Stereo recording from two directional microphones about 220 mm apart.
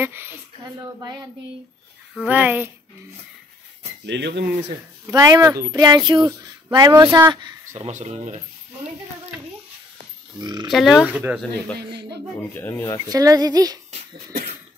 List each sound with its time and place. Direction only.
0.0 s speech: 10° right (ahead or behind)
2.2 s speech: 5° right (ahead or behind)
4.0 s speech: 50° right (ahead or behind)
5.0 s speech: 15° right (ahead or behind)
7.7 s speech: 30° right (ahead or behind)
10.4 s speech: 20° right (ahead or behind)
10.7 s speech: centre (ahead or behind)
12.5 s speech: 10° left (ahead or behind)
13.1 s speech: 15° right (ahead or behind)